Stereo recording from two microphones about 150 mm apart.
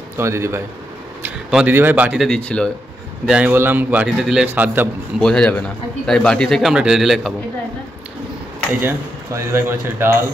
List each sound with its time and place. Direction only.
0.2 s a man's voice: 20° right (ahead or behind); by 2.7 s 5° left (ahead or behind)
3.3 s a man's voice: 10° right (ahead or behind)
5.2 s a man's voice: 5° left (ahead or behind)
8.8 s a man's voice: 15° right (ahead or behind)